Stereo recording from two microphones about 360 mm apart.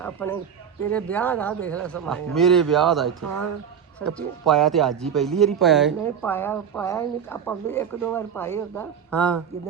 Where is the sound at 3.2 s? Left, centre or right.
Right.